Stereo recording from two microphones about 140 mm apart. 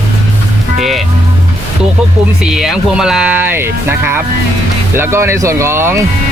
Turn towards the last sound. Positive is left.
turn(degrees=-15)  # may be behind; listen again after turning